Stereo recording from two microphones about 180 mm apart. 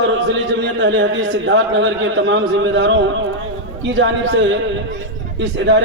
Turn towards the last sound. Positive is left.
turn(degrees=-90)